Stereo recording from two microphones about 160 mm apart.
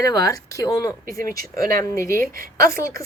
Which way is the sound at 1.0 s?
65° right (ahead or behind).